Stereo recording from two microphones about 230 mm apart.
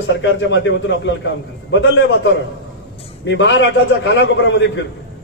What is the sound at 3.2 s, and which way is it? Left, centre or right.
A man's voice, left.